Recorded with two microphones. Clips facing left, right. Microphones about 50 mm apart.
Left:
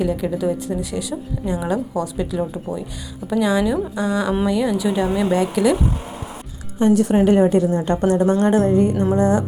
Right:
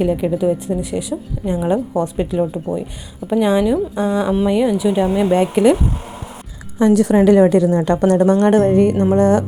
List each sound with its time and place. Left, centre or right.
0.0 s speech: right
2.0 s a woman's voice: right
2.4 s speech: right
4.4 s speech: centre
6.9 s a woman's voice: right